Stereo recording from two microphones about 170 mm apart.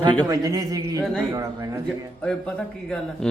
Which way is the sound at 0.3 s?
20° right (ahead or behind).